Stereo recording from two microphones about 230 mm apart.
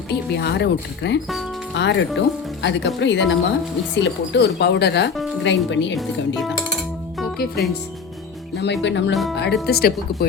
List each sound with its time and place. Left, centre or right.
0.1 s speech: left
6.0 s speech: centre
8.5 s speech: left